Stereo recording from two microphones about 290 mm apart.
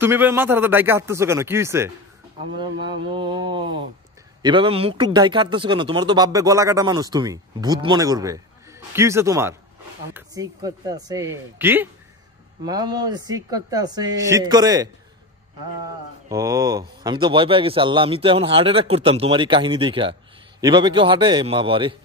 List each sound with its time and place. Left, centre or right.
0.0 s speech: centre
3.2 s speech: centre
16.3 s speech: centre